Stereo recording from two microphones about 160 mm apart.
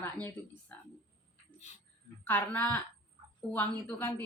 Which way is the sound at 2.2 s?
10° left (ahead or behind).